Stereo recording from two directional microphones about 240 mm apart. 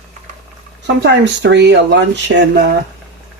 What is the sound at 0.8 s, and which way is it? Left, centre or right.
Speech, right.